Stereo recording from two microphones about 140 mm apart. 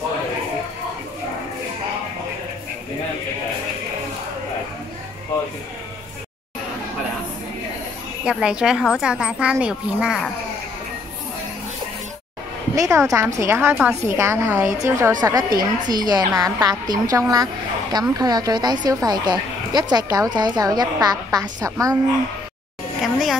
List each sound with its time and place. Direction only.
8.3 s speech: 5° right (ahead or behind)
12.7 s a woman's voice: 25° right (ahead or behind)
23.0 s a woman's voice: centre (ahead or behind)